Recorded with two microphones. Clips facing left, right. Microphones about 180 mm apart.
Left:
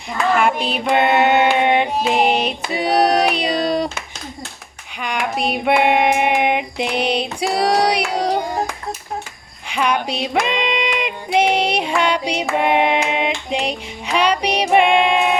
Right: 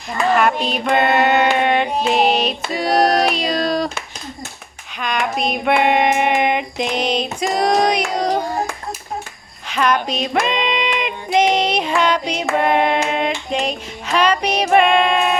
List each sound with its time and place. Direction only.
0.3 s child singing: 10° left (ahead or behind)
3.7 s a sound: 20° left (ahead or behind)
4.9 s female singing: 10° left (ahead or behind)
9.6 s female singing: 10° left (ahead or behind)
12.5 s child singing: 15° left (ahead or behind)